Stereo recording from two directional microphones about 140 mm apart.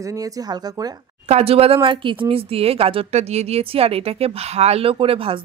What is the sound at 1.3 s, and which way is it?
Speech, 45° right (ahead or behind).